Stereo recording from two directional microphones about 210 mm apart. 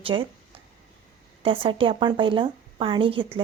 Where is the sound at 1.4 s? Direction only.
25° right (ahead or behind).